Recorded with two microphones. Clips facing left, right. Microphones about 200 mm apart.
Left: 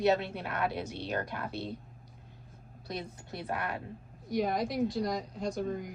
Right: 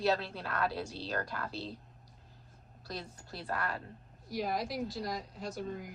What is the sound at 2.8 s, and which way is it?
Speech, 20° left (ahead or behind).